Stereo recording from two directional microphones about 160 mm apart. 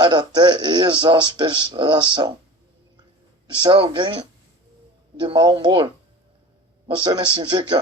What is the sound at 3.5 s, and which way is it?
Speech, 30° right (ahead or behind).